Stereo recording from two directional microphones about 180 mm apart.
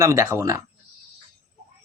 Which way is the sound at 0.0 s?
15° right (ahead or behind).